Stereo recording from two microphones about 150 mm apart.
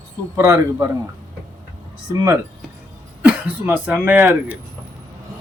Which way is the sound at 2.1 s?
20° right (ahead or behind).